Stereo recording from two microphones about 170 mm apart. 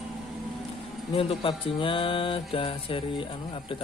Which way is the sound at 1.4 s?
30° left (ahead or behind).